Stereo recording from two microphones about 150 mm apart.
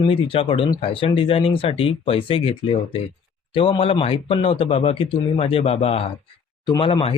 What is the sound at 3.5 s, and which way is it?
A man's voice, 35° left (ahead or behind).